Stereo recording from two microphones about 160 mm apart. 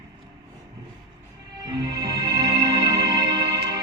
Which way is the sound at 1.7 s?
25° right (ahead or behind).